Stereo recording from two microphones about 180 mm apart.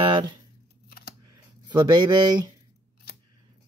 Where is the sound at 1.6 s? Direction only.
20° right (ahead or behind).